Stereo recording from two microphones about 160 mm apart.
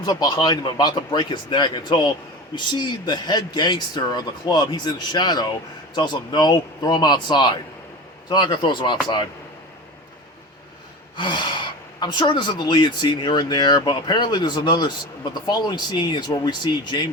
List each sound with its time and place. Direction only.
0.0 s speech: 25° left (ahead or behind)
11.2 s speech: 30° left (ahead or behind)